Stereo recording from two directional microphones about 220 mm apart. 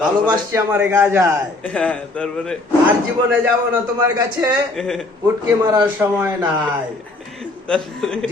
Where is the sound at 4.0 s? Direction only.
20° right (ahead or behind).